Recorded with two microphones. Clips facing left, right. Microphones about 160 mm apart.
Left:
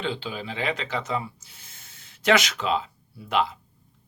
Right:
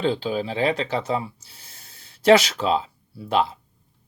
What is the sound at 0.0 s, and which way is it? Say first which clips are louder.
Speech: right 7 dB; 40° right (ahead or behind).